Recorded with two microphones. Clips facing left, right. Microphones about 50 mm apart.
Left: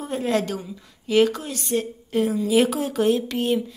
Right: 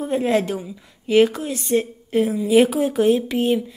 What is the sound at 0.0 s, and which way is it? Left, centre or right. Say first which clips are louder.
A woman's voice: right 4 dB; centre.